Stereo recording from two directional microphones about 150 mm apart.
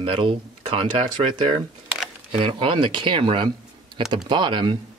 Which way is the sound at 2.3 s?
35° right (ahead or behind).